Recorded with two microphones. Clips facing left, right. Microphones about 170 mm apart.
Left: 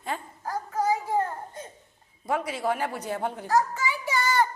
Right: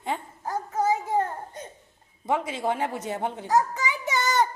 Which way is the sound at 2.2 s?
25° right (ahead or behind).